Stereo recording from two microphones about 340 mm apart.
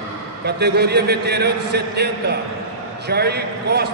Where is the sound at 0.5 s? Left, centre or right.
Right.